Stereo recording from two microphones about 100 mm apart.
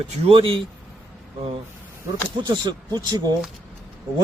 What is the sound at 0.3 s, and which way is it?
Speech, 60° right (ahead or behind).